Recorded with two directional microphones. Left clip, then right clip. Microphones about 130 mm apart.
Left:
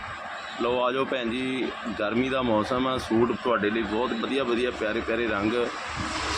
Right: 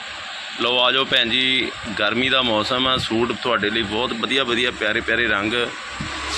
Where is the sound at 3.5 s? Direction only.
20° right (ahead or behind).